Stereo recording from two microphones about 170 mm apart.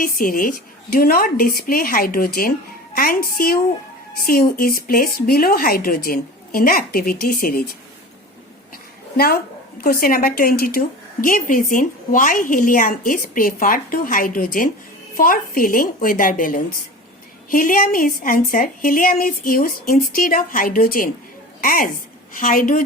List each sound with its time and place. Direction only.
0.0 s a woman's voice: 60° left (ahead or behind)
9.1 s a woman's voice: 65° left (ahead or behind)